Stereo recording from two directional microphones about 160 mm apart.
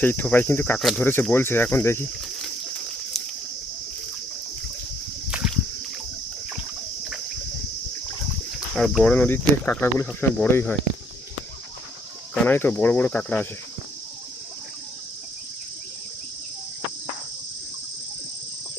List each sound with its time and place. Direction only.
0.0 s speech: 10° left (ahead or behind)
5.3 s a sound: 5° right (ahead or behind)
8.7 s speech: centre (ahead or behind)
12.3 s speech: 10° left (ahead or behind)